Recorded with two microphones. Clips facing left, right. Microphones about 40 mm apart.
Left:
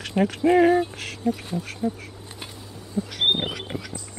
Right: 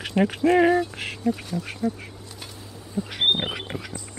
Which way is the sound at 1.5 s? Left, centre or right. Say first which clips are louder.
Even; left.